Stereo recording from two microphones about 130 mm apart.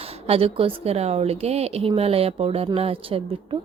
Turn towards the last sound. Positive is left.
turn(degrees=-45)  # may be behind; listen again after turning